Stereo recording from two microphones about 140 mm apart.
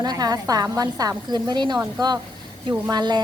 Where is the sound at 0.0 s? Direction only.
30° right (ahead or behind).